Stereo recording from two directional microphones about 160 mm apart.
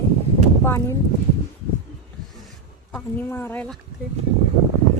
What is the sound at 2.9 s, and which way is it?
Speech, 10° left (ahead or behind).